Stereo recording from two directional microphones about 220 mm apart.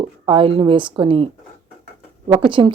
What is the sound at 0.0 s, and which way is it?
Speech, 25° right (ahead or behind).